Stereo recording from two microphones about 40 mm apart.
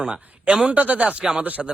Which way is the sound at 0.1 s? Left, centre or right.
Right.